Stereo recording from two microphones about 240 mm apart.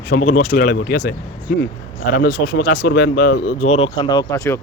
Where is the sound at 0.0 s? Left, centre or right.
Left.